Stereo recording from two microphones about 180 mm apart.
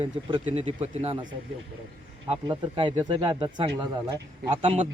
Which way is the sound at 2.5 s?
25° right (ahead or behind).